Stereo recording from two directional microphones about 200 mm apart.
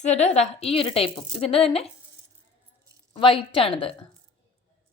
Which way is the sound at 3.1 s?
25° left (ahead or behind).